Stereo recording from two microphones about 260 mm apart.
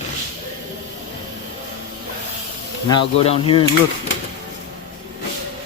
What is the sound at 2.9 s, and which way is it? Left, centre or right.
Speech, centre.